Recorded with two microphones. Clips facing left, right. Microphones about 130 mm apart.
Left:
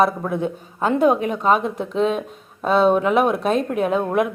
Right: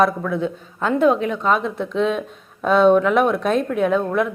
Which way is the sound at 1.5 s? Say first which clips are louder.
Left 2 dB; 45° left (ahead or behind).